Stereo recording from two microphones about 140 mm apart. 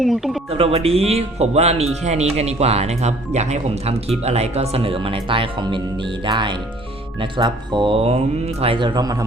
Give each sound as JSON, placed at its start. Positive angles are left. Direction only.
{"t": 0.0, "sound": "speech", "side_deg": 0}
{"t": 0.5, "sound": "speech", "side_deg": -45}